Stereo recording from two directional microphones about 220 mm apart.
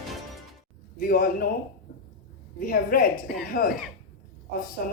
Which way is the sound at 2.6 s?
40° left (ahead or behind).